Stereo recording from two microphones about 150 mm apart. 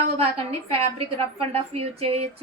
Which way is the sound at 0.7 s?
40° right (ahead or behind).